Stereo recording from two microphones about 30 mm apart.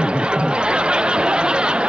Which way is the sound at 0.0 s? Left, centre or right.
Right.